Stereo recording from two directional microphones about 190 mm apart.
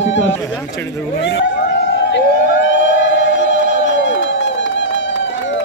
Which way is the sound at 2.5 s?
75° left (ahead or behind).